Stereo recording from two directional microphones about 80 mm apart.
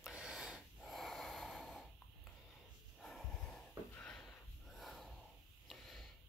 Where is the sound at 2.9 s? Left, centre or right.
Centre.